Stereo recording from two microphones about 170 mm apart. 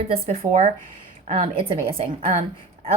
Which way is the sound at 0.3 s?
40° right (ahead or behind).